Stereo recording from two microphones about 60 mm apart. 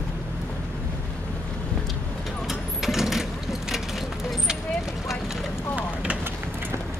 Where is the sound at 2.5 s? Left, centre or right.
Centre.